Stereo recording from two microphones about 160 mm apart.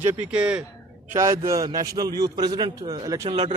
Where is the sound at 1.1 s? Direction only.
20° right (ahead or behind).